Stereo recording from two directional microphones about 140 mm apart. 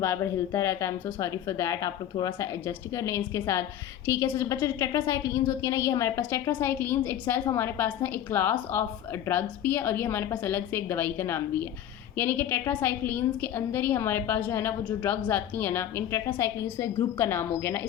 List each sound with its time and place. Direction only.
0.0 s a woman's voice: 20° left (ahead or behind)